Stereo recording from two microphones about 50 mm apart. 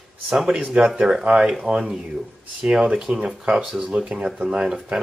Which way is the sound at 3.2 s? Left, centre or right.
Right.